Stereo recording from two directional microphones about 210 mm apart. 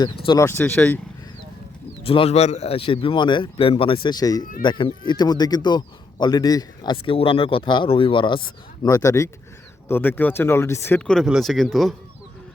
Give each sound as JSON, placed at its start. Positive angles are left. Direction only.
{"t": 0.0, "sound": "speech", "side_deg": 20}
{"t": 2.0, "sound": "speech", "side_deg": 25}